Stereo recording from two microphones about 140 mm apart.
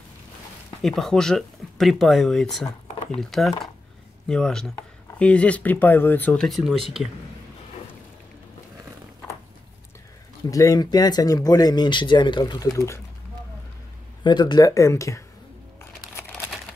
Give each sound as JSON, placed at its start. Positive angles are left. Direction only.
{"t": 0.8, "sound": "speech", "side_deg": 0}
{"t": 10.5, "sound": "speech", "side_deg": 25}
{"t": 14.2, "sound": "speech", "side_deg": 30}